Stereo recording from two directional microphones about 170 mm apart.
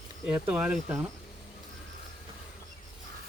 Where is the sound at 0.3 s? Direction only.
10° right (ahead or behind).